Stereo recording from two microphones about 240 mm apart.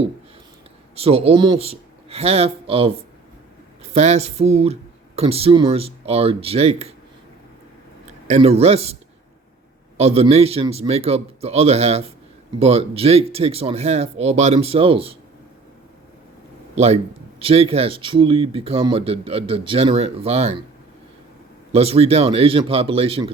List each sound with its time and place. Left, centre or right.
0.9 s speech: right
3.9 s a man's voice: right
8.3 s a man's voice: right
10.0 s a man's voice: right
16.7 s a man's voice: right
21.7 s a man's voice: right